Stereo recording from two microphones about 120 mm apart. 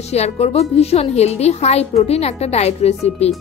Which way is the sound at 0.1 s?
60° left (ahead or behind).